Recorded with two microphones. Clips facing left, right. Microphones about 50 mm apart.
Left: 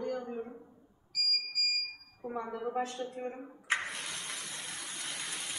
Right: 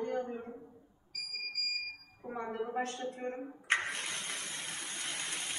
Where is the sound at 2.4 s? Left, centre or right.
Right.